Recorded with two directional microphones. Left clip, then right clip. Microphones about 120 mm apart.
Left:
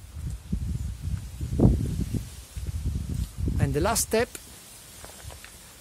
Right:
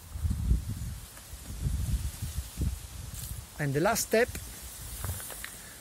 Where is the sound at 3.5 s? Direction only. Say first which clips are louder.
Left 2 dB; 45° left (ahead or behind).